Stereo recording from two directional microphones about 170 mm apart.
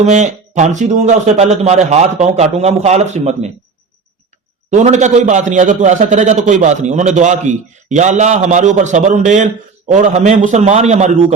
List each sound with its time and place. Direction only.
0.0 s a man's voice: 45° right (ahead or behind)
4.7 s a man's voice: 45° right (ahead or behind)